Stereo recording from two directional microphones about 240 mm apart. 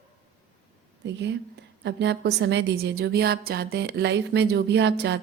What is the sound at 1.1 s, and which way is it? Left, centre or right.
A woman's voice, right.